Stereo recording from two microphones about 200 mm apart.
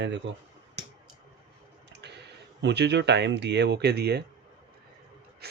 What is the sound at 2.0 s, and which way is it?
Speech, 60° right (ahead or behind).